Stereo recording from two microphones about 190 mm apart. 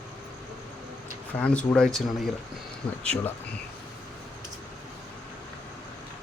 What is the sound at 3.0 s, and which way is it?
Speech, 5° left (ahead or behind).